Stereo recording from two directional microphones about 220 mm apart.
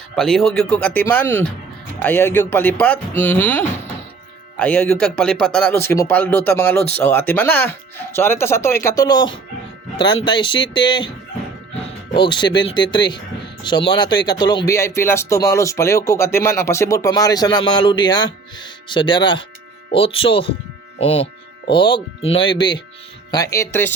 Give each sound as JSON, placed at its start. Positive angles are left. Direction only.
{"t": 0.2, "sound": "speech", "side_deg": 0}